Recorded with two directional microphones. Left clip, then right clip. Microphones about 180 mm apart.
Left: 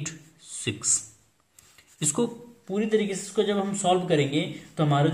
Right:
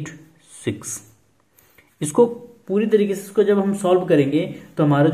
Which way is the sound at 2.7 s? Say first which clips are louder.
Right 7 dB; 35° right (ahead or behind).